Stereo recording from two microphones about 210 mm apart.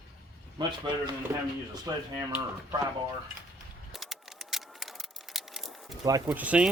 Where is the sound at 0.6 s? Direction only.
20° right (ahead or behind).